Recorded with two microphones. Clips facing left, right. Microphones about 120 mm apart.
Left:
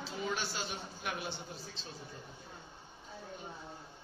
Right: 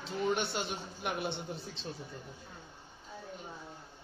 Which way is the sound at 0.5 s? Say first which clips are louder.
Right 4 dB; 65° right (ahead or behind).